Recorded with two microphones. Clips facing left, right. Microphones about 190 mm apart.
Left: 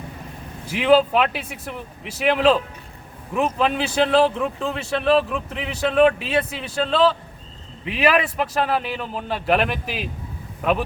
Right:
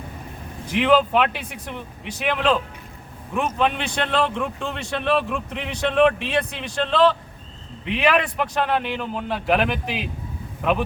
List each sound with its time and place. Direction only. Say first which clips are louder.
0.7 s a man's voice: left 2 dB; 5° left (ahead or behind)